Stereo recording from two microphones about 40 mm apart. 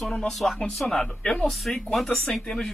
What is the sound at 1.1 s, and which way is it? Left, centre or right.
Speech, left.